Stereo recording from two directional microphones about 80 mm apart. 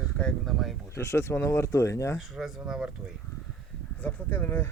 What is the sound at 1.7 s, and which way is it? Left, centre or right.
Speech, left.